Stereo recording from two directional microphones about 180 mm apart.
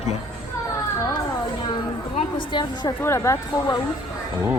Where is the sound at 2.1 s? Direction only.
25° left (ahead or behind).